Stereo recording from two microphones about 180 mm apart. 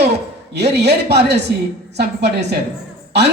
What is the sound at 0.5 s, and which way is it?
A man's voice, 70° right (ahead or behind).